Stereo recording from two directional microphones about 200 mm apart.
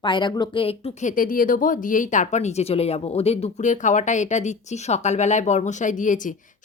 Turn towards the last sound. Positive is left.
turn(degrees=40)  # may be behind; listen again after turning